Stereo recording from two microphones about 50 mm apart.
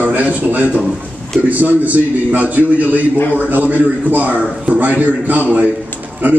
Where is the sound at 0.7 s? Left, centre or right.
Centre.